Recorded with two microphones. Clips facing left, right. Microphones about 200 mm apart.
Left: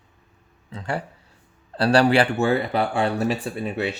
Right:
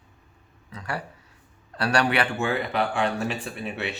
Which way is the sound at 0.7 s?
25° left (ahead or behind).